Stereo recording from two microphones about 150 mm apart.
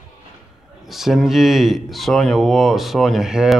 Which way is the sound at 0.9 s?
Centre (ahead or behind).